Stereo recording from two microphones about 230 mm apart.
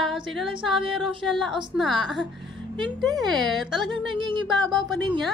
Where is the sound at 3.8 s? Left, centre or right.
Centre.